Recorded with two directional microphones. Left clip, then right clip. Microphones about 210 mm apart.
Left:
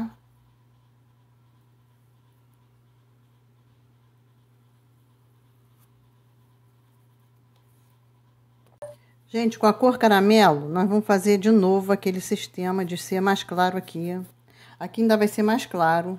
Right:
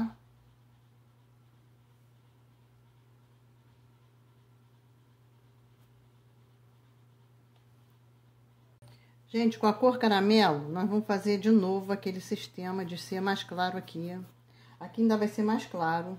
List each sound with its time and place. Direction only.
9.3 s speech: 30° left (ahead or behind)